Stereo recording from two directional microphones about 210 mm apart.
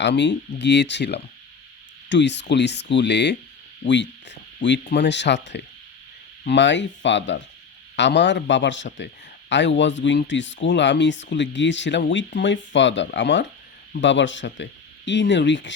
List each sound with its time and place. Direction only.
0.0 s speech: 55° left (ahead or behind)